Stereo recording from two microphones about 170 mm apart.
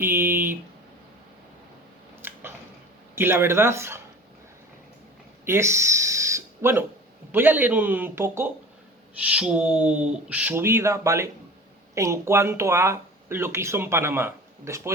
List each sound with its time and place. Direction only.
0.0 s speech: 15° right (ahead or behind)
2.2 s a sound: 10° right (ahead or behind)
3.2 s speech: 15° right (ahead or behind)
5.5 s speech: 15° right (ahead or behind)